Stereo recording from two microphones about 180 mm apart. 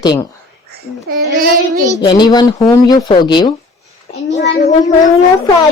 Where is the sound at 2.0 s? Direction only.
25° left (ahead or behind).